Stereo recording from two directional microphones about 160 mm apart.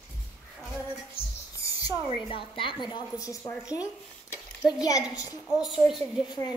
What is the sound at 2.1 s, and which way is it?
A woman's voice, 30° left (ahead or behind).